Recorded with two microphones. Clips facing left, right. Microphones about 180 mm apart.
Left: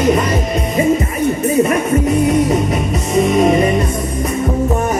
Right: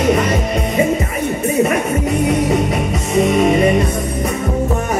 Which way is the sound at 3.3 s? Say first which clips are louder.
Left 3 dB; 35° left (ahead or behind).